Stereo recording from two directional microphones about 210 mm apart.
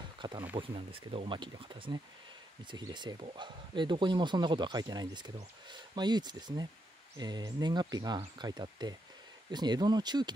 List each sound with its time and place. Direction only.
0.2 s speech: 20° right (ahead or behind)